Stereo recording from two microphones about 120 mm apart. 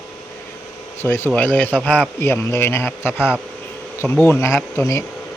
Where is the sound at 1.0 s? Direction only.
20° left (ahead or behind).